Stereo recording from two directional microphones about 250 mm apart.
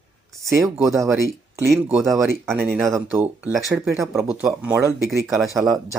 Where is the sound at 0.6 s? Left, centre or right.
Centre.